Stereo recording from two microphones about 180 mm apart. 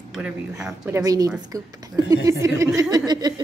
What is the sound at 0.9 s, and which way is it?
Speech, 20° right (ahead or behind).